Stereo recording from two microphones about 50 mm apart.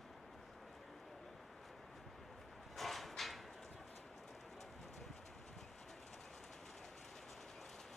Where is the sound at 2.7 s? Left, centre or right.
Centre.